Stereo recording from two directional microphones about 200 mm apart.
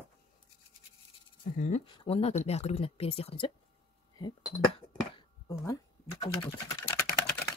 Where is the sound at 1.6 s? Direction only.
35° left (ahead or behind).